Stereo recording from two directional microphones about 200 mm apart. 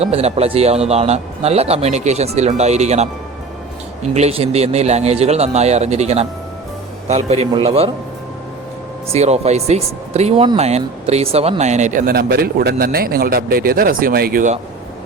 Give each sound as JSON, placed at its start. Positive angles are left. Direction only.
{"t": 0.0, "sound": "a man's voice", "side_deg": -30}
{"t": 9.1, "sound": "speech", "side_deg": -35}